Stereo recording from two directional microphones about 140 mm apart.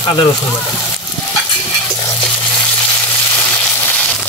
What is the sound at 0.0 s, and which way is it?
Speech, 35° left (ahead or behind).